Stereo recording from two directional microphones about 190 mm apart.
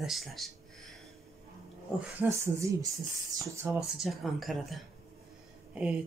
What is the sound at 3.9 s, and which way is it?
Speech, centre (ahead or behind).